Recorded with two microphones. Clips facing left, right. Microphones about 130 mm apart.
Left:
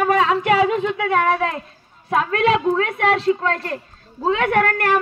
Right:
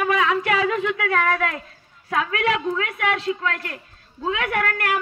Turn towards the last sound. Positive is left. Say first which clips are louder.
# left 6 dB
turn(degrees=35)  # may be behind; listen again after turning